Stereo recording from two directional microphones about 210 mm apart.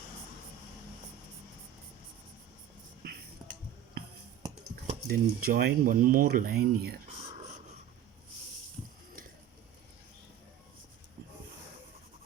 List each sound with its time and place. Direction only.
5.0 s speech: 45° right (ahead or behind)